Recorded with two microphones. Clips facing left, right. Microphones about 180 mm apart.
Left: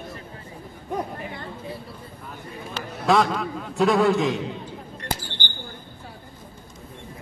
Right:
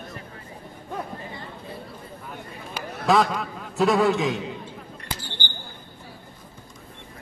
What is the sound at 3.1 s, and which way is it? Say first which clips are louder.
A man's voice: left 1 dB; centre (ahead or behind).